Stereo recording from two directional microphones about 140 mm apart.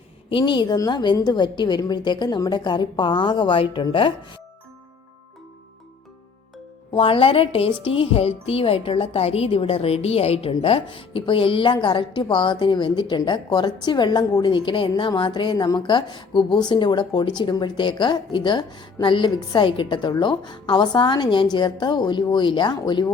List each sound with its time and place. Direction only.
0.3 s a woman's voice: 35° left (ahead or behind)
6.9 s a woman's voice: 40° left (ahead or behind)